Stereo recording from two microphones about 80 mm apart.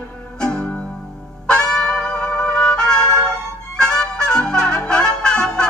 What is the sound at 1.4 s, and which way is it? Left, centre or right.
Music, centre.